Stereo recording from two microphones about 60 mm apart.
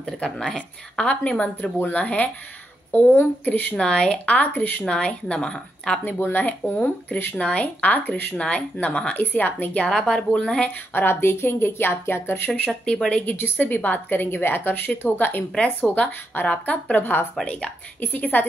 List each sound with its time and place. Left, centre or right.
0.0 s a woman's voice: centre
1.6 s speech: left
3.7 s a woman's voice: centre
4.3 s speech: left
4.8 s a woman's voice: centre
6.0 s a woman's voice: left
7.3 s speech: centre
9.1 s speech: left
9.8 s a woman's voice: centre
10.9 s a woman's voice: left
12.6 s a woman's voice: centre
13.2 s a woman's voice: left